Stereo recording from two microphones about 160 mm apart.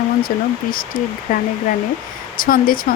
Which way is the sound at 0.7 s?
60° left (ahead or behind).